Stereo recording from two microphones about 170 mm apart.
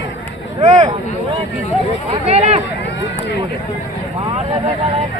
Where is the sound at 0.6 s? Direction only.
40° right (ahead or behind).